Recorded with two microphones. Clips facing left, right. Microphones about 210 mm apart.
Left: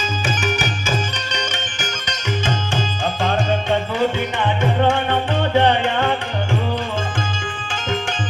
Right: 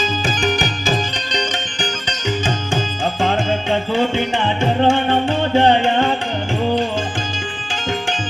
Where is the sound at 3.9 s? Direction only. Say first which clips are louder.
Right 2 dB; 30° right (ahead or behind).